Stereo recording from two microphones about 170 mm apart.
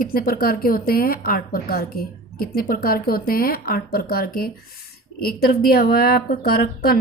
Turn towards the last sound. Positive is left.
turn(degrees=60)  # may be behind; listen again after turning